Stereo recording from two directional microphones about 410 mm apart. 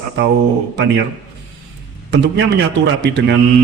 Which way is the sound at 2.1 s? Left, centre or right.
Right.